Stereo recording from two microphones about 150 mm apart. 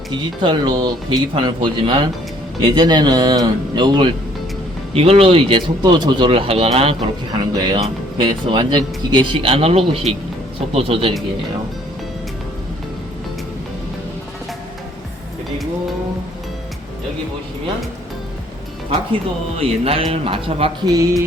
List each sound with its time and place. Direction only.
0.1 s speech: 30° right (ahead or behind)
4.9 s speech: 40° right (ahead or behind)
7.3 s speech: 30° right (ahead or behind)
19.5 s speech: 40° right (ahead or behind)
20.8 s speech: 25° right (ahead or behind)